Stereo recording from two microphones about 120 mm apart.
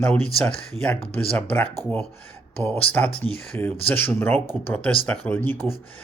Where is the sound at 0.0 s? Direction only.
15° left (ahead or behind).